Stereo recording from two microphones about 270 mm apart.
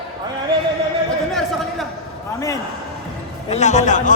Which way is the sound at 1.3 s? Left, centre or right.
Centre.